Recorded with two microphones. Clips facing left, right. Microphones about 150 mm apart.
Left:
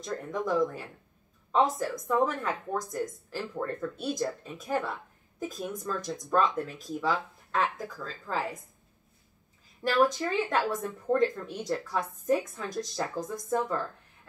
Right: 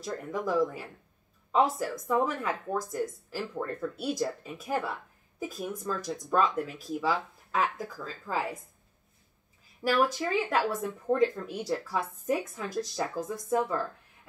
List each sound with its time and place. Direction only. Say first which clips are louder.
0.0 s speech: even; 5° right (ahead or behind)
9.8 s speech: left 1 dB; 5° right (ahead or behind)